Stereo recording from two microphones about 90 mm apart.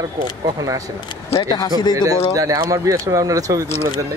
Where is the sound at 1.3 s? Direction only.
55° left (ahead or behind).